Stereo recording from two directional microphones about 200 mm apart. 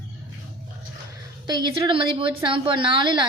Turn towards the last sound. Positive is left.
turn(degrees=-25)  # may be behind; listen again after turning